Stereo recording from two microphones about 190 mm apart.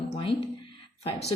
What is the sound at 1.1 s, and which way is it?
Speech, 35° left (ahead or behind).